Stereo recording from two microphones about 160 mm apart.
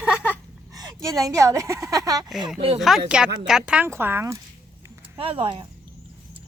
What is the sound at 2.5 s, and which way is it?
Speech, 35° right (ahead or behind).